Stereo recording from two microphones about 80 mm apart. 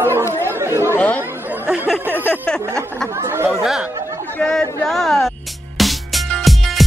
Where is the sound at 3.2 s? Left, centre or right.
Right.